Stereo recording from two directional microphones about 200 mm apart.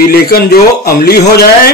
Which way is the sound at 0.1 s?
50° left (ahead or behind).